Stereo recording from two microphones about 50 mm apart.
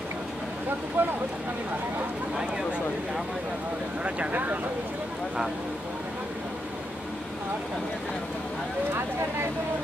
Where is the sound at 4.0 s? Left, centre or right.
Right.